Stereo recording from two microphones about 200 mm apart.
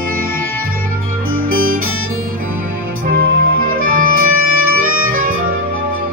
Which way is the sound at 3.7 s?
45° right (ahead or behind).